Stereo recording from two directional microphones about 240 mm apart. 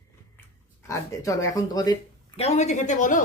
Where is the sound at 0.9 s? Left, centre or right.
Centre.